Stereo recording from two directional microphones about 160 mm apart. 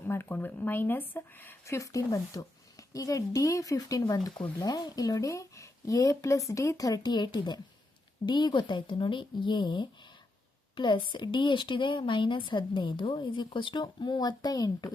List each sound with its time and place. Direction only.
0.1 s speech: 15° left (ahead or behind)